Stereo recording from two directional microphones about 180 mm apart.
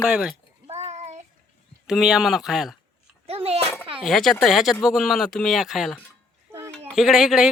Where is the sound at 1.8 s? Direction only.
Centre (ahead or behind).